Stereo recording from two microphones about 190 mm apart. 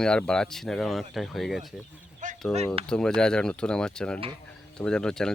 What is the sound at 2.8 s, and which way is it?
Speech, 5° left (ahead or behind).